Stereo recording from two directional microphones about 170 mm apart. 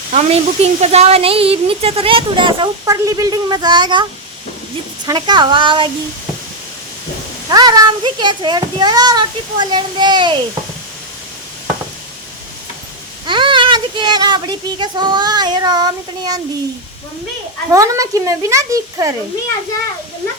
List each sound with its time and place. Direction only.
0.1 s a woman's voice: 40° right (ahead or behind)
5.0 s speech: 25° right (ahead or behind)
7.5 s speech: 25° right (ahead or behind)
13.2 s speech: 30° right (ahead or behind)
17.7 s speech: 20° right (ahead or behind)